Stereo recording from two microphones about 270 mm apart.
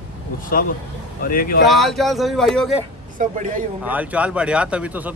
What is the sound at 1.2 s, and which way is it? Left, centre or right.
Speech, left.